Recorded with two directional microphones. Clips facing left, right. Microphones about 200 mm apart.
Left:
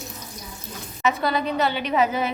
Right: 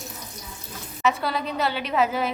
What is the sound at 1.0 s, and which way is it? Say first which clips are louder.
Speech: left 2 dB; centre (ahead or behind).